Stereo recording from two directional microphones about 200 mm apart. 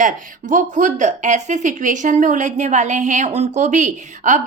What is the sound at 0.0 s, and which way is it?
Speech, 40° right (ahead or behind).